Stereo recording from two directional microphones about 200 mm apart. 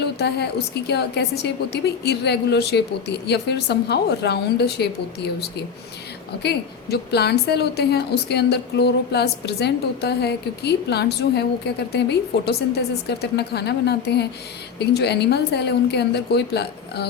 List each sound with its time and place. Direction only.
0.0 s a woman's voice: 55° left (ahead or behind)